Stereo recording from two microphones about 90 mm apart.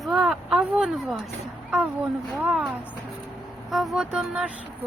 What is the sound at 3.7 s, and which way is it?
Speech, centre (ahead or behind).